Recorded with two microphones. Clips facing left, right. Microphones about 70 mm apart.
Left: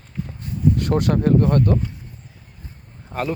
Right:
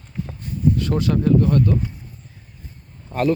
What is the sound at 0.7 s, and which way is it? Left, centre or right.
Speech, left.